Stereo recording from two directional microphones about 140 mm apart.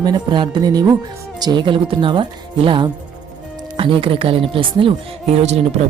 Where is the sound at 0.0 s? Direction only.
30° right (ahead or behind); by 5.5 s 50° right (ahead or behind).